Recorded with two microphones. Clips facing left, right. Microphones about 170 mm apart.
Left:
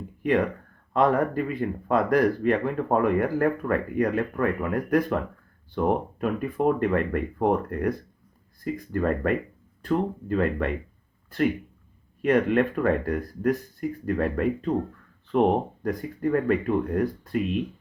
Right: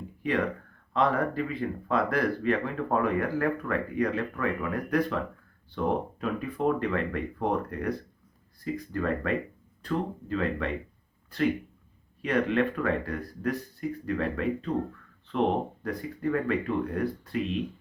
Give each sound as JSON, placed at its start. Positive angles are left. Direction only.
{"t": 0.2, "sound": "a sound", "side_deg": 50}
{"t": 0.9, "sound": "speech", "side_deg": 50}
{"t": 12.2, "sound": "speech", "side_deg": 50}